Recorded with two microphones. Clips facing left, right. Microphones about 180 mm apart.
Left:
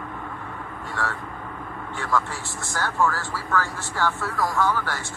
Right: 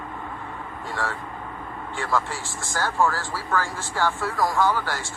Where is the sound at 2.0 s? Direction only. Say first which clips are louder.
Even; 10° right (ahead or behind).